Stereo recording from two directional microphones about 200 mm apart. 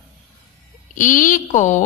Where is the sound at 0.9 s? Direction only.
40° left (ahead or behind).